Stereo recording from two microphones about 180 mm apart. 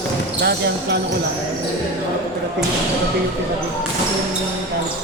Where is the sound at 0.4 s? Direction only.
65° right (ahead or behind).